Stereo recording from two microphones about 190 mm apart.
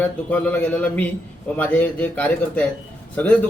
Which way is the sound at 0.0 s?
10° left (ahead or behind).